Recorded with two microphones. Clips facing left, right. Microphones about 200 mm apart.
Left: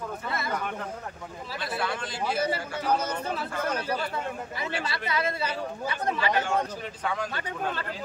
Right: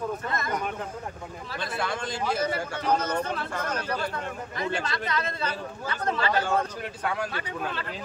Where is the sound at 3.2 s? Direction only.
10° left (ahead or behind).